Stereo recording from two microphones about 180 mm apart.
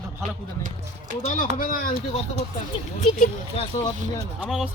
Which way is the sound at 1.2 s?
45° left (ahead or behind).